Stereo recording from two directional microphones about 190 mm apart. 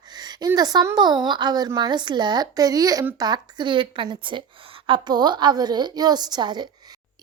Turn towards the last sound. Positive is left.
turn(degrees=-20)  # may be behind; listen again after turning